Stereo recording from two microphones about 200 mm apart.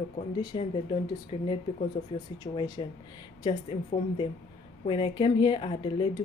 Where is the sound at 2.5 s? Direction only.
20° left (ahead or behind).